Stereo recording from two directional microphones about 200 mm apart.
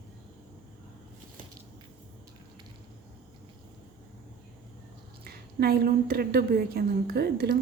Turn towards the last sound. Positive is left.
turn(degrees=-50)  # may be behind; listen again after turning